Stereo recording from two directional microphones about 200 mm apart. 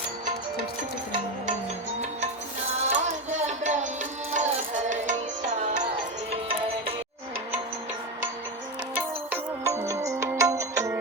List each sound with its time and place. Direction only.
2.7 s a sound: 35° right (ahead or behind)
4.3 s music: 35° right (ahead or behind)
9.0 s music: 10° right (ahead or behind)